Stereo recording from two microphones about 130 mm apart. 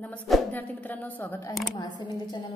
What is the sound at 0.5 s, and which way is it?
Speech, 15° left (ahead or behind).